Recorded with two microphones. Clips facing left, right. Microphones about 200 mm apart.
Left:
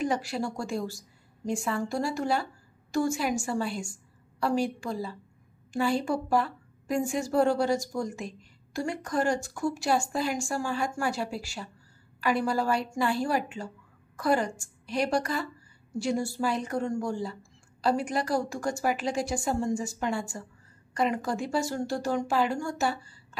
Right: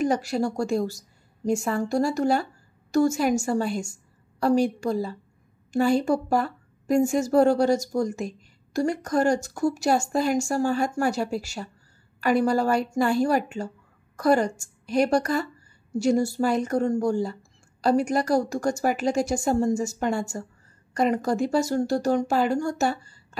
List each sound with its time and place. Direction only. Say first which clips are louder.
0.0 s a woman's voice: right 5 dB; 40° right (ahead or behind)